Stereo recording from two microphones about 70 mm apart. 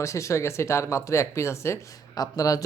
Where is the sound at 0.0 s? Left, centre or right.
Left.